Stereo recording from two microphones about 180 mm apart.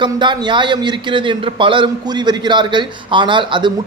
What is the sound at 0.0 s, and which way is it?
A man's voice, 25° right (ahead or behind).